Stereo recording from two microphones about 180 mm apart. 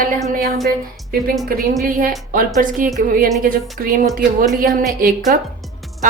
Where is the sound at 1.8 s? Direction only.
50° right (ahead or behind).